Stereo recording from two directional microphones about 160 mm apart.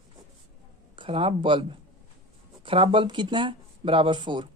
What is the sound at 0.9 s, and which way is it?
A woman's voice, 35° right (ahead or behind).